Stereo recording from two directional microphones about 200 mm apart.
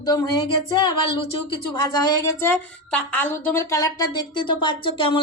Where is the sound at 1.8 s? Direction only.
20° left (ahead or behind).